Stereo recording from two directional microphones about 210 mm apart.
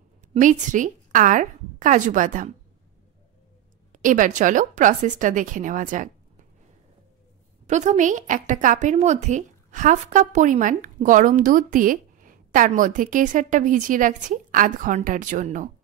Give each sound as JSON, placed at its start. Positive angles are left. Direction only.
{"t": 0.3, "sound": "a woman's voice", "side_deg": -35}
{"t": 3.9, "sound": "a woman's voice", "side_deg": -40}
{"t": 7.6, "sound": "a woman's voice", "side_deg": -35}